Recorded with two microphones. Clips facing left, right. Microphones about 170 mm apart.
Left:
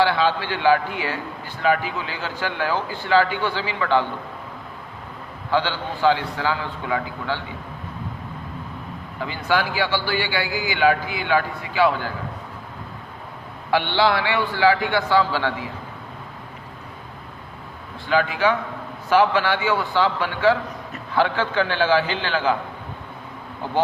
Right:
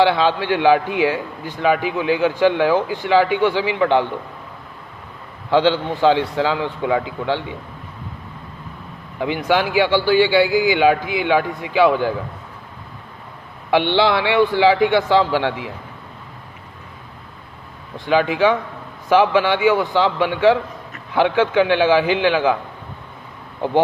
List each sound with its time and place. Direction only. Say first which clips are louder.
0.0 s a man's voice: right 4 dB; 15° right (ahead or behind)
5.5 s a man's voice: right 7 dB; 20° right (ahead or behind)
9.2 s a man's voice: right 5 dB; 20° right (ahead or behind)
13.7 s a man's voice: right 4 dB; 20° right (ahead or behind)
18.0 s a man's voice: right 4 dB; 20° right (ahead or behind)